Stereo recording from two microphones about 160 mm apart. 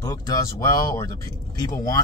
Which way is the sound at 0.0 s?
20° left (ahead or behind).